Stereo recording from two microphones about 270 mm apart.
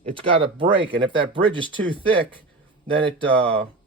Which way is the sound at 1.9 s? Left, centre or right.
Centre.